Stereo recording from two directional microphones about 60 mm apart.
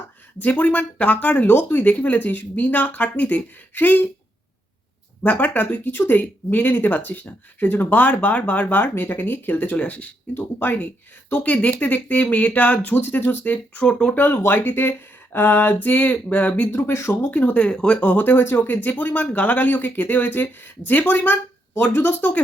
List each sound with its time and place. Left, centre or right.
0.3 s speech: left
5.2 s speech: left
10.3 s speech: left
16.7 s speech: left
17.3 s speech: left